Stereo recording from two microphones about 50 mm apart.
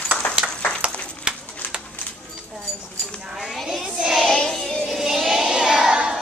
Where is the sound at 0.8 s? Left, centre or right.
Centre.